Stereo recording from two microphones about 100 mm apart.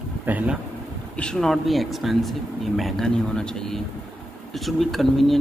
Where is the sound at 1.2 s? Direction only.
5° left (ahead or behind).